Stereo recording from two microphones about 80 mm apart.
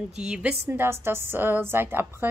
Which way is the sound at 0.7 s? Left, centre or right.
Right.